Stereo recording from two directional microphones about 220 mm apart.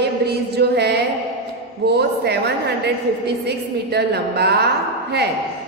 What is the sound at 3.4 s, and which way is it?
A woman's voice, 50° right (ahead or behind).